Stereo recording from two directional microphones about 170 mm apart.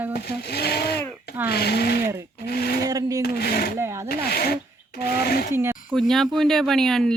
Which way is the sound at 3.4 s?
60° left (ahead or behind).